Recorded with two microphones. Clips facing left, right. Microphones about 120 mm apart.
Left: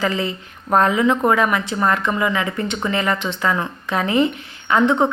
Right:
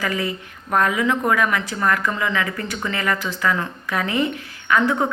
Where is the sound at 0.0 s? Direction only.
25° left (ahead or behind).